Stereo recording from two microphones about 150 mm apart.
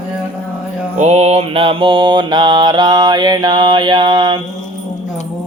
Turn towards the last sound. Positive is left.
turn(degrees=-30)  # may be behind; listen again after turning